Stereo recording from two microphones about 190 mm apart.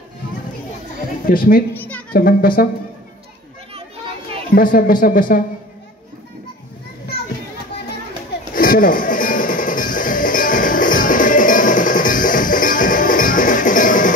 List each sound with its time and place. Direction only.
1.2 s speech: 50° left (ahead or behind)
1.7 s music: 10° left (ahead or behind)
2.1 s speech: 50° left (ahead or behind)
3.7 s children playing: 30° right (ahead or behind)
4.6 s speech: 50° left (ahead or behind)
8.5 s music: 45° left (ahead or behind)